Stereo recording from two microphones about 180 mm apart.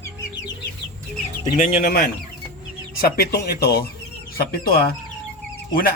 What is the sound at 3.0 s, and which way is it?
Speech, 60° left (ahead or behind).